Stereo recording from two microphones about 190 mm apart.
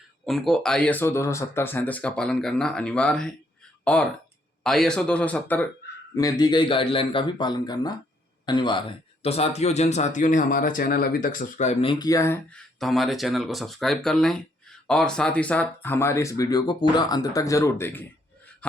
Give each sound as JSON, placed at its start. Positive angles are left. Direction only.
{"t": 0.3, "sound": "speech", "side_deg": 0}
{"t": 4.6, "sound": "speech", "side_deg": 5}
{"t": 6.1, "sound": "a man's voice", "side_deg": 20}